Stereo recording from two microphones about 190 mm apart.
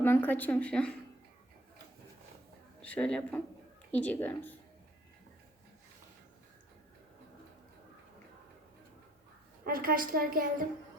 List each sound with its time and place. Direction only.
0.0 s a woman's voice: 10° left (ahead or behind)
2.8 s a woman's voice: 5° left (ahead or behind)
9.6 s a woman's voice: 50° right (ahead or behind)